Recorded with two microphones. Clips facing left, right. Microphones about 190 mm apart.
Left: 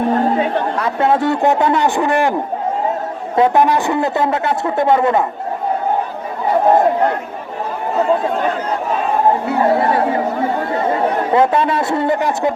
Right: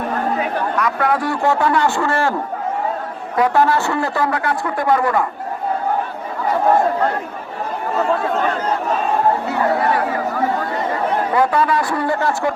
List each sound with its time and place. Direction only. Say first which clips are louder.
0.1 s speech: left 5 dB; 25° left (ahead or behind)
3.3 s a man's voice: left 3 dB; 20° left (ahead or behind)
6.7 s a man's voice: left 3 dB; 20° left (ahead or behind)
8.1 s a man's voice: left 2 dB; 20° left (ahead or behind)
9.5 s chatter: left 3 dB; 25° left (ahead or behind)